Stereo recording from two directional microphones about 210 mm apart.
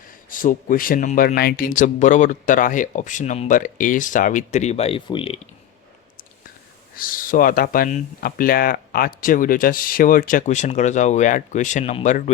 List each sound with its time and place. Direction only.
0.3 s speech: 40° left (ahead or behind)
6.9 s speech: 40° left (ahead or behind)